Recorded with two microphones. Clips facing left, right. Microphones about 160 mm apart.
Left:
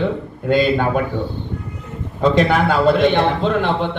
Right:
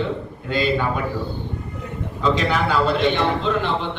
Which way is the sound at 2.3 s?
50° left (ahead or behind).